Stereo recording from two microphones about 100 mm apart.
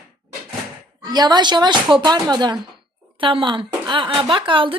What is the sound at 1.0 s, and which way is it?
Speech, 40° right (ahead or behind).